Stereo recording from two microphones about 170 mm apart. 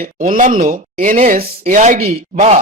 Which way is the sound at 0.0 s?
55° right (ahead or behind).